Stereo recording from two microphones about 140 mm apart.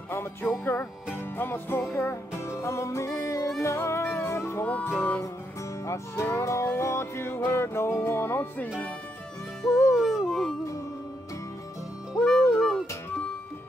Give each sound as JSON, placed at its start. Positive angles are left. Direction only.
{"t": 0.1, "sound": "music", "side_deg": 15}
{"t": 9.9, "sound": "howl", "side_deg": 0}
{"t": 12.1, "sound": "music", "side_deg": 5}